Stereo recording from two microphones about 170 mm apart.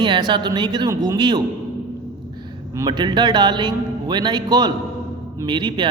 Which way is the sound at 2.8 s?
25° right (ahead or behind).